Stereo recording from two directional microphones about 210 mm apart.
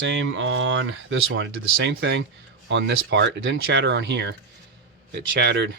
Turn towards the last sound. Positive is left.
turn(degrees=-50)  # may be behind; listen again after turning